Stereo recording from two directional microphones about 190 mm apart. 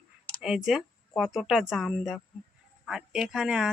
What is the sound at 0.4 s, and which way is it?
A woman's voice, 5° right (ahead or behind).